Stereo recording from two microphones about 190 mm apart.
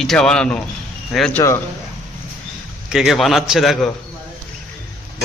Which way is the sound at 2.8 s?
Centre (ahead or behind).